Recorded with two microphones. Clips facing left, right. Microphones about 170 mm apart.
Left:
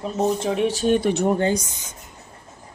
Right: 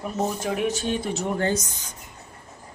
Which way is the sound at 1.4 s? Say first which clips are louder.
Left 3 dB; 15° left (ahead or behind).